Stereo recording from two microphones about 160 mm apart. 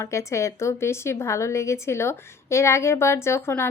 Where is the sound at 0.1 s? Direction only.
20° left (ahead or behind).